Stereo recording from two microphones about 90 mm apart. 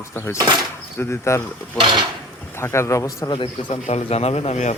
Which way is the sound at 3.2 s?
65° left (ahead or behind).